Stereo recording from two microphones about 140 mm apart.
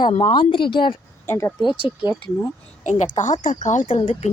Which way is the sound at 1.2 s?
20° left (ahead or behind).